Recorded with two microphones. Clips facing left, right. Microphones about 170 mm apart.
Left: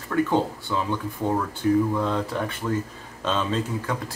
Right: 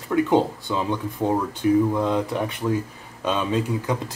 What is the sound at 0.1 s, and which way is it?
Speech, 20° right (ahead or behind).